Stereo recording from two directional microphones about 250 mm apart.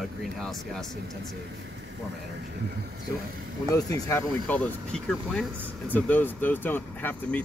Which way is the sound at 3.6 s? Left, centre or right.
Centre.